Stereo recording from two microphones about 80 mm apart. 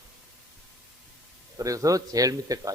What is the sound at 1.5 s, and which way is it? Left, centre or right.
Speech, right.